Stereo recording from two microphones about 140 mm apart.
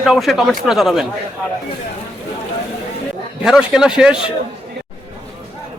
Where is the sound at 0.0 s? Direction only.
Centre (ahead or behind).